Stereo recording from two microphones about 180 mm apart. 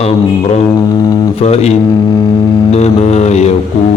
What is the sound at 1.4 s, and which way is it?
Mantra, 35° left (ahead or behind).